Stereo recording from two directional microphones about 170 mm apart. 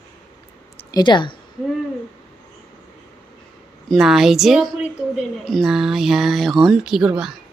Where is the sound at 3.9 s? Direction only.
Centre (ahead or behind).